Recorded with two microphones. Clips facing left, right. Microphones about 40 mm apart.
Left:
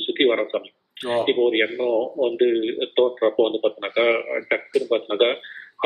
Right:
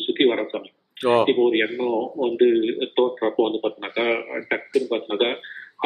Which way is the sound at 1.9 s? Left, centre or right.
Left.